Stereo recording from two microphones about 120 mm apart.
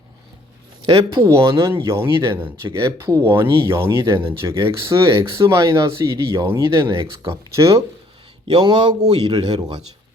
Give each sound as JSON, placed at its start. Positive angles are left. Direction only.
{"t": 0.9, "sound": "a man's voice", "side_deg": -30}
{"t": 7.0, "sound": "speech", "side_deg": -45}
{"t": 7.5, "sound": "a man's voice", "side_deg": -25}